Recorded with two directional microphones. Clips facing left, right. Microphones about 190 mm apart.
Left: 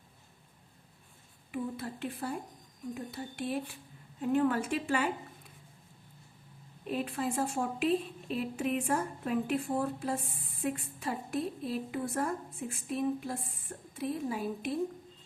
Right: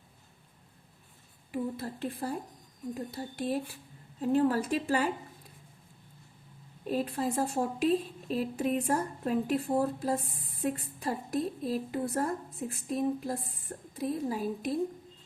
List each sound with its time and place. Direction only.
1.5 s a woman's voice: 35° right (ahead or behind)
6.8 s a woman's voice: 35° right (ahead or behind)